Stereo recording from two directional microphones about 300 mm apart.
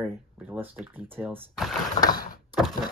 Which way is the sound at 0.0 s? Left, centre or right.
Centre.